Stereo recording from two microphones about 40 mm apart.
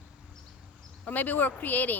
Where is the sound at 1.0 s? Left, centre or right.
Left.